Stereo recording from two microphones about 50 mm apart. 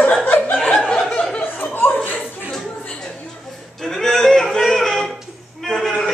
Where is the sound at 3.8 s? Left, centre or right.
Centre.